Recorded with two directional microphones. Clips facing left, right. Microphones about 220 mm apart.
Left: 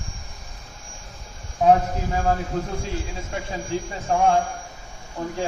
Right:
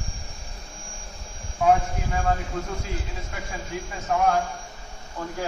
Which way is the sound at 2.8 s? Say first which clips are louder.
Left 3 dB; 30° left (ahead or behind).